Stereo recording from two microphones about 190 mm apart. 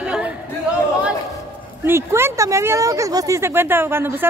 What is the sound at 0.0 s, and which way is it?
Chatter, 5° right (ahead or behind).